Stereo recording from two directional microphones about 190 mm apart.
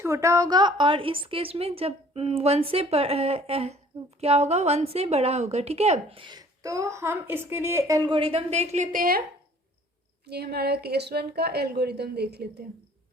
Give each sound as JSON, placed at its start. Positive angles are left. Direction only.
{"t": 0.0, "sound": "a woman's voice", "side_deg": -15}
{"t": 10.2, "sound": "a woman's voice", "side_deg": -55}